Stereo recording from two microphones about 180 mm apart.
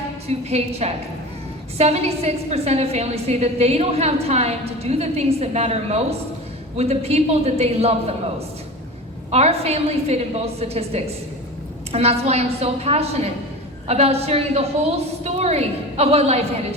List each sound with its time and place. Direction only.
0.3 s a woman's voice: 35° right (ahead or behind)
9.3 s a woman's voice: 35° right (ahead or behind)